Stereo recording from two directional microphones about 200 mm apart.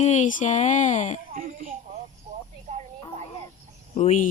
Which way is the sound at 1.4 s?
45° right (ahead or behind).